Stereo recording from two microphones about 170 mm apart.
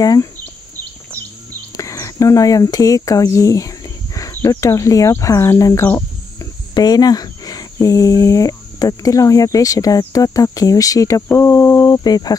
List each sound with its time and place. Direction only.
0.0 s speech: 20° left (ahead or behind)
1.8 s speech: 20° left (ahead or behind)